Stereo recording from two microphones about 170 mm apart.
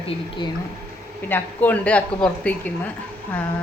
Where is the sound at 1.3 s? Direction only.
10° left (ahead or behind).